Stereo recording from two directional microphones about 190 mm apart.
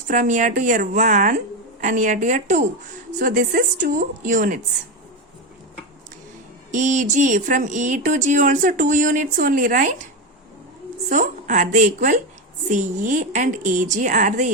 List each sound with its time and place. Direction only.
0.1 s a woman's voice: 40° right (ahead or behind)
6.7 s speech: 40° right (ahead or behind)
11.1 s speech: 40° right (ahead or behind)